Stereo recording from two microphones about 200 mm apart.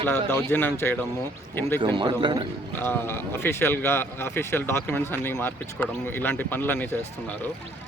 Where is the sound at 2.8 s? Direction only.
10° left (ahead or behind).